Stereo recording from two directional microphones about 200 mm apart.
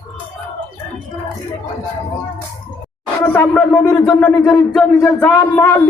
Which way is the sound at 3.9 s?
20° left (ahead or behind).